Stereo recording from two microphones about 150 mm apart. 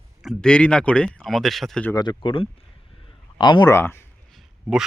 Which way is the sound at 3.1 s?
30° left (ahead or behind).